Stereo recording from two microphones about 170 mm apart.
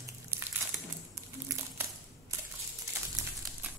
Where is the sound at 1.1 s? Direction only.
15° right (ahead or behind).